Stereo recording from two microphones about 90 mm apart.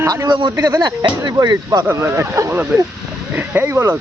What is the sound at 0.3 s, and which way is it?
Speech, 55° right (ahead or behind).